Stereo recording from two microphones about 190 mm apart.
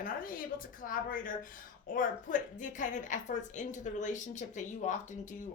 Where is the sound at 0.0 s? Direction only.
50° left (ahead or behind).